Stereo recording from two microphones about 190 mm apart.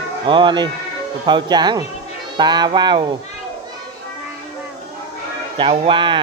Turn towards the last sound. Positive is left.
turn(degrees=-25)  # may be behind; listen again after turning